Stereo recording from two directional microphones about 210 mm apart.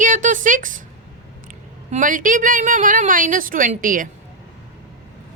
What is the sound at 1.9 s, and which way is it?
Speech, 40° right (ahead or behind).